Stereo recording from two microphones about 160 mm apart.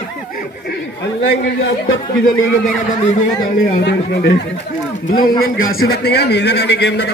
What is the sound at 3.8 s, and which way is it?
Speech, 90° left.